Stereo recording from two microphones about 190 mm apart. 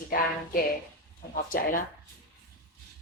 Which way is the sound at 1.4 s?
50° left (ahead or behind).